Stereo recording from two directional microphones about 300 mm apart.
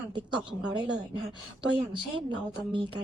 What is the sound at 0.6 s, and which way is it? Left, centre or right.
Speech, centre.